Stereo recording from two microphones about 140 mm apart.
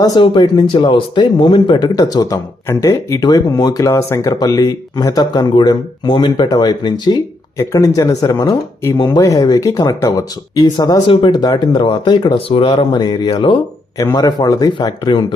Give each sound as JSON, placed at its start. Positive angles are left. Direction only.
{"t": 0.0, "sound": "speech", "side_deg": 30}